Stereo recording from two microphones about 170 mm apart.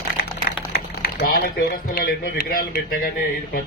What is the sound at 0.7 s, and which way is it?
Speech, 65° left (ahead or behind).